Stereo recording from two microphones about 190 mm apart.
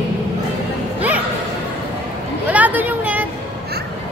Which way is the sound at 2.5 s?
10° right (ahead or behind).